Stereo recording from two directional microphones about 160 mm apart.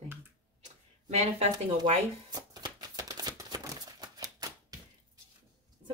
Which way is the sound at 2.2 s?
25° right (ahead or behind).